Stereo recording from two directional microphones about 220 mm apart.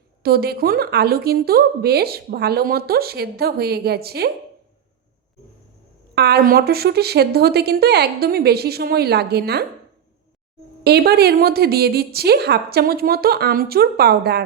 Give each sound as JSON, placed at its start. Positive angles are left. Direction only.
{"t": 0.2, "sound": "speech", "side_deg": -45}
{"t": 6.1, "sound": "speech", "side_deg": -45}
{"t": 10.8, "sound": "speech", "side_deg": -45}